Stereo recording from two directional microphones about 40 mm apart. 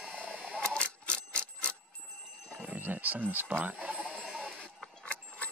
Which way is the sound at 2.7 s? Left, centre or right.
Right.